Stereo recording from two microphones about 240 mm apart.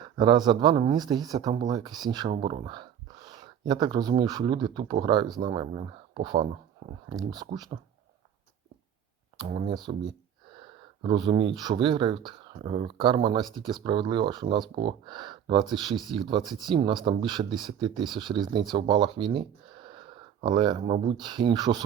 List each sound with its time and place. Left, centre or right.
0.2 s speech: centre
9.4 s speech: right